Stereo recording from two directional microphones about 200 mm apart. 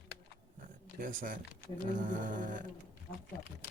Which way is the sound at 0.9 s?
45° right (ahead or behind).